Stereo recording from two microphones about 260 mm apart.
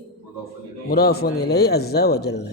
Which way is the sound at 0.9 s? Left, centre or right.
Left.